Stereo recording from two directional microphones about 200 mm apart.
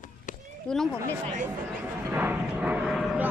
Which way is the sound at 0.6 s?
Centre (ahead or behind).